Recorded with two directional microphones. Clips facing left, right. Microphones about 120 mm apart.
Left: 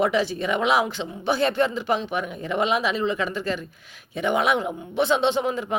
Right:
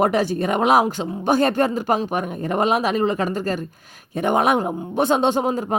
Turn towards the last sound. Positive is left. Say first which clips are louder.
# right 3 dB
turn(degrees=-40)  # may be behind; listen again after turning